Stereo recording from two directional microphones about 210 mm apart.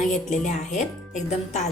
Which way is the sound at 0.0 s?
35° left (ahead or behind).